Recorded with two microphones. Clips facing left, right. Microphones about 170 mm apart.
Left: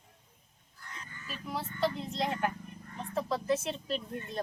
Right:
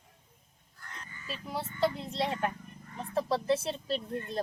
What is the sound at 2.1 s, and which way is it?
Speech, 30° right (ahead or behind).